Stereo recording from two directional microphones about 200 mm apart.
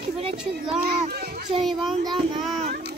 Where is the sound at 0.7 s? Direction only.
45° right (ahead or behind).